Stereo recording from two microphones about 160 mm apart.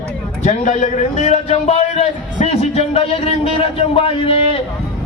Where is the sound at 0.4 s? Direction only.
45° left (ahead or behind).